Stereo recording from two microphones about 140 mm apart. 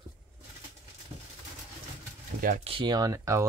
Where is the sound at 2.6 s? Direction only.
40° right (ahead or behind).